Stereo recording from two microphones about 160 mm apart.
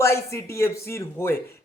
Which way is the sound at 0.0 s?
15° left (ahead or behind).